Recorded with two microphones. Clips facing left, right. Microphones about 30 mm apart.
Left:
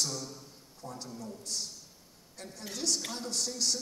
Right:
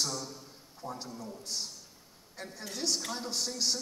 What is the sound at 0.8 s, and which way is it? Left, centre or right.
A man's voice, right.